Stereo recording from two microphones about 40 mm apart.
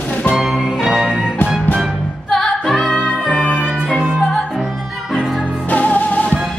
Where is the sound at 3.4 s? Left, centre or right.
Right.